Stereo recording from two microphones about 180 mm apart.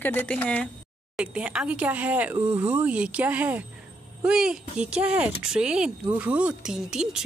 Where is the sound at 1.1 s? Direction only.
5° right (ahead or behind).